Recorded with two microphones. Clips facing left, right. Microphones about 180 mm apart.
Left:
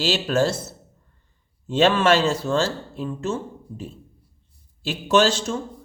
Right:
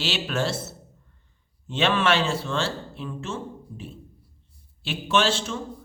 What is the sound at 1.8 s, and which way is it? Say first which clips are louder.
Speech: left 5 dB; 40° left (ahead or behind).